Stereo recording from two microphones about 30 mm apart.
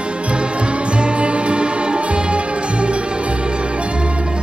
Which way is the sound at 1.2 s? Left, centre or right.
Right.